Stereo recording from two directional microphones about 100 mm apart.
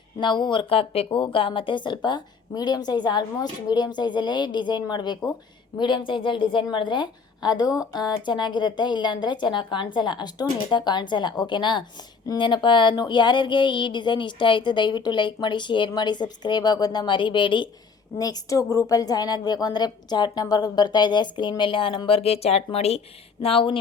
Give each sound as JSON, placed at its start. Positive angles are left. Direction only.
{"t": 0.2, "sound": "speech", "side_deg": 50}
{"t": 0.7, "sound": "speech", "side_deg": 70}
{"t": 8.2, "sound": "speech", "side_deg": 50}
{"t": 18.2, "sound": "speech", "side_deg": 40}
{"t": 21.6, "sound": "speech", "side_deg": 60}
{"t": 23.4, "sound": "speech", "side_deg": 70}